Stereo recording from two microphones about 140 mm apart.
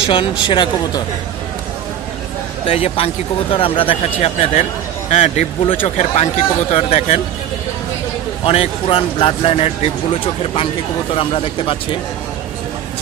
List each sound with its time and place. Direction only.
0.0 s speech: 40° left (ahead or behind)
2.7 s a man's voice: 45° left (ahead or behind)
8.5 s speech: 40° left (ahead or behind)